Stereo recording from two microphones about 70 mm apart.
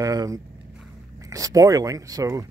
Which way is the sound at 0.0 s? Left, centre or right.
Right.